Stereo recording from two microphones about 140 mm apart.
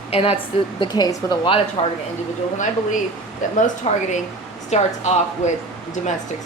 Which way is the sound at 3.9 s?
40° left (ahead or behind).